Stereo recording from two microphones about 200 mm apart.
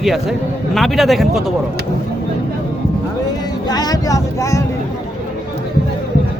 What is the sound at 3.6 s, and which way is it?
Speech, 20° left (ahead or behind).